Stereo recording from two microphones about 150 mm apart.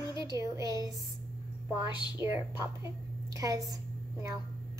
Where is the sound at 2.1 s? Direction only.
15° right (ahead or behind).